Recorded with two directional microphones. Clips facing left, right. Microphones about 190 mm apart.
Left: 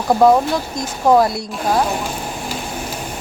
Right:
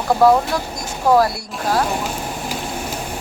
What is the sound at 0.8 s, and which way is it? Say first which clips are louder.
Speech: left 2 dB; 20° left (ahead or behind).